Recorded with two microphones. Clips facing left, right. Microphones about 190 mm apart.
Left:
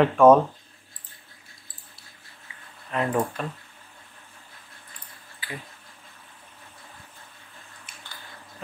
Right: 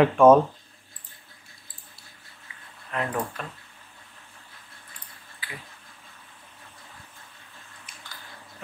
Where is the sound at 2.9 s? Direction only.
30° left (ahead or behind).